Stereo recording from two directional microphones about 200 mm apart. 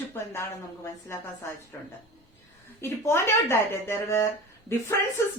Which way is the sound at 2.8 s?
15° left (ahead or behind).